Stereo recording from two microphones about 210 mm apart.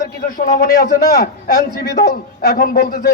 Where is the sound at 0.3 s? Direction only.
45° left (ahead or behind).